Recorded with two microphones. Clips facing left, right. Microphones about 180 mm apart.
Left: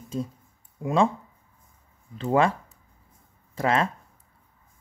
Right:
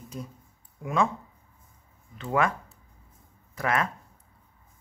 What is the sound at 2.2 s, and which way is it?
Speech, 30° left (ahead or behind).